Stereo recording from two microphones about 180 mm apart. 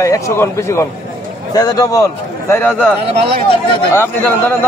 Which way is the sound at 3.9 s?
10° left (ahead or behind).